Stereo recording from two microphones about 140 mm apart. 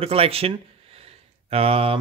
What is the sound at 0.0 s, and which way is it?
Speech, 45° right (ahead or behind).